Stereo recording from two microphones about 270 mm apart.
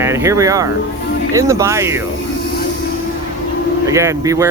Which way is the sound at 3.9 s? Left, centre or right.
Centre.